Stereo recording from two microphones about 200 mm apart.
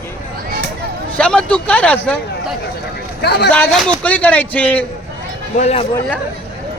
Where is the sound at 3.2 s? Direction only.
55° left (ahead or behind).